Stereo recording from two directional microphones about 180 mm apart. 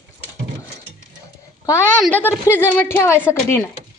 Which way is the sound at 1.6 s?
15° left (ahead or behind).